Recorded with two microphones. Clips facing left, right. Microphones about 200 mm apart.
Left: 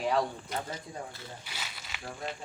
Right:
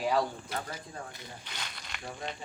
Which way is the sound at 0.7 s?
15° right (ahead or behind).